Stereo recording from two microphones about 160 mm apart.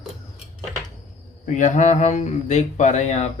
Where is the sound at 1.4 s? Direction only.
50° left (ahead or behind).